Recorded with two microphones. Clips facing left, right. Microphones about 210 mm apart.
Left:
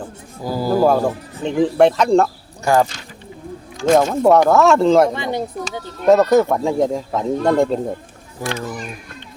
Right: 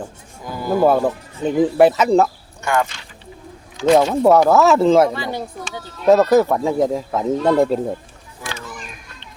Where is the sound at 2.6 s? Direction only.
35° left (ahead or behind).